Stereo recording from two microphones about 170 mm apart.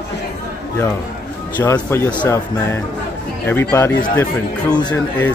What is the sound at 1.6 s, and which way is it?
Speech, 15° left (ahead or behind).